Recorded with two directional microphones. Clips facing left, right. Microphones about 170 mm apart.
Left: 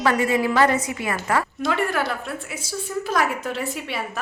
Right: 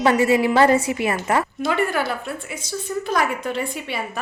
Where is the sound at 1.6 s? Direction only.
Centre (ahead or behind).